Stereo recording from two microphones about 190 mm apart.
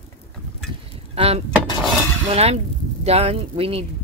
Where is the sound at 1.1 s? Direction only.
30° right (ahead or behind).